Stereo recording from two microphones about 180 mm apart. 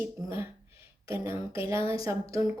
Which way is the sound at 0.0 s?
15° right (ahead or behind).